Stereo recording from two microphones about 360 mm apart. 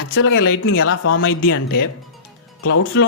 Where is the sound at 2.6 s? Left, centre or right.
Left.